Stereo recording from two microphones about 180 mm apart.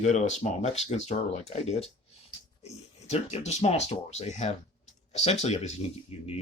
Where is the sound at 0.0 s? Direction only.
40° left (ahead or behind).